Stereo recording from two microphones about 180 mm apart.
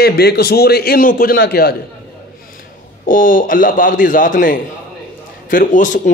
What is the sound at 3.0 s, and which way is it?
A man's voice, 50° left (ahead or behind).